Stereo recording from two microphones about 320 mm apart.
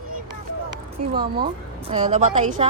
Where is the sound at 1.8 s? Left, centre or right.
Centre.